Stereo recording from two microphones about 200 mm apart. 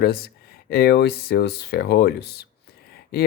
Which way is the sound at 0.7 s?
50° left (ahead or behind).